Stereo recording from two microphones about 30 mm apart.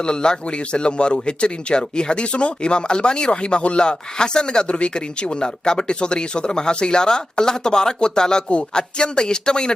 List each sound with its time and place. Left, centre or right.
0.0 s speech: left
4.7 s speech: left